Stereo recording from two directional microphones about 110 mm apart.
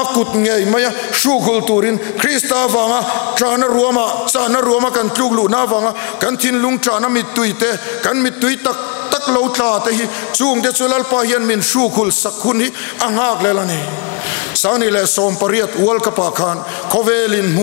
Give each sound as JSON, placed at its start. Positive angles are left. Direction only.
{"t": 0.0, "sound": "a man's voice", "side_deg": 20}